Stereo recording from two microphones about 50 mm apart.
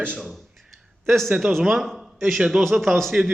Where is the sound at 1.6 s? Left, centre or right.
Centre.